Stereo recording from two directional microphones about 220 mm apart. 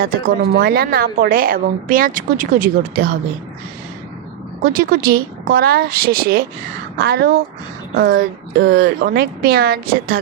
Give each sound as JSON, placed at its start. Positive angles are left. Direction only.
{"t": 0.0, "sound": "a woman's voice", "side_deg": -40}
{"t": 4.6, "sound": "speech", "side_deg": -40}